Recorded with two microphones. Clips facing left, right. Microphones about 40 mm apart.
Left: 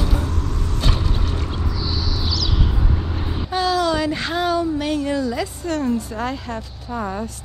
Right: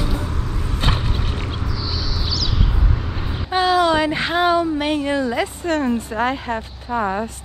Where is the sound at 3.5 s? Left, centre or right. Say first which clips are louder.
Right 4 dB; right.